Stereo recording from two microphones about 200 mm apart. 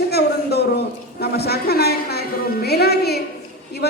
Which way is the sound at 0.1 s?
55° left (ahead or behind).